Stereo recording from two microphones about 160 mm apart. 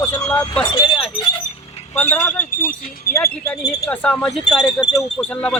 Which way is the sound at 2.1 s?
10° left (ahead or behind).